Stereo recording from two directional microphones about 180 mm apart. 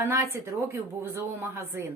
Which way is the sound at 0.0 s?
15° right (ahead or behind).